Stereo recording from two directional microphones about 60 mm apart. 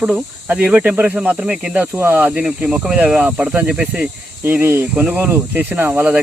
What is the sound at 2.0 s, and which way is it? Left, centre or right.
Speech, right.